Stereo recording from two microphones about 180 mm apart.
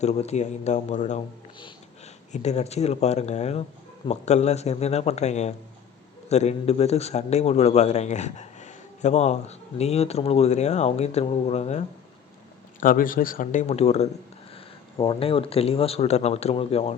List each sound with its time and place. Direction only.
0.0 s a man's voice: 35° left (ahead or behind)
2.3 s a man's voice: 40° left (ahead or behind)
12.8 s a man's voice: 50° left (ahead or behind)